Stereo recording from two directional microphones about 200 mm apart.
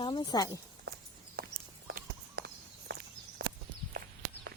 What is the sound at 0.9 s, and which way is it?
Walk, 55° right (ahead or behind).